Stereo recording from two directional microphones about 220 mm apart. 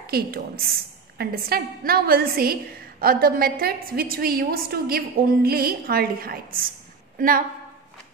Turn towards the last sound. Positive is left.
turn(degrees=-35)  # may be behind; listen again after turning